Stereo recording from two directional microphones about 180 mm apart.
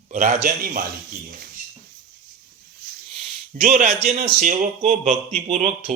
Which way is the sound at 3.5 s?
45° right (ahead or behind).